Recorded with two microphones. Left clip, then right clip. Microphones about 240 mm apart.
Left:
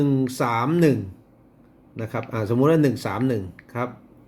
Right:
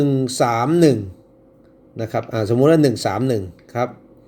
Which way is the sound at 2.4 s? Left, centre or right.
Centre.